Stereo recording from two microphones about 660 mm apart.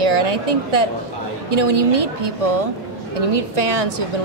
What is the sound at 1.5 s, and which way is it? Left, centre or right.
A woman's voice, right.